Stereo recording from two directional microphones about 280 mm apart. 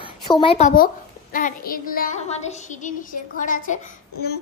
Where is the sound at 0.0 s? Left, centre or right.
Centre.